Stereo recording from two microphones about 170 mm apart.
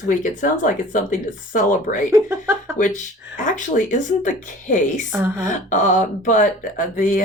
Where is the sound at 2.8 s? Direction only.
50° left (ahead or behind).